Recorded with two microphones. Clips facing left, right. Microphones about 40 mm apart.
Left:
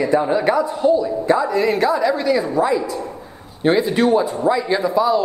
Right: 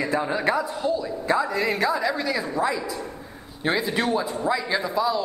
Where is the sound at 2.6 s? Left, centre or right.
Centre.